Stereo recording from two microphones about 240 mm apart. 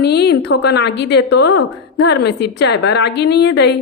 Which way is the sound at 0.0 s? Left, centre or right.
Left.